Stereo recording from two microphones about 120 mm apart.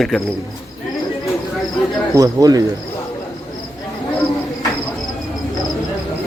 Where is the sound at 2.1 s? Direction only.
30° right (ahead or behind).